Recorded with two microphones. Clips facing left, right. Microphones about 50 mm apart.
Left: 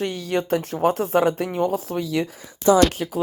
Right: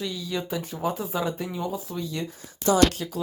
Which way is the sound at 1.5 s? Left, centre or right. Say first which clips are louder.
Left 8 dB; left.